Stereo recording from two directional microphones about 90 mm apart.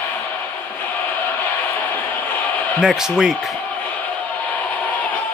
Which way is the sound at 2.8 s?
5° right (ahead or behind).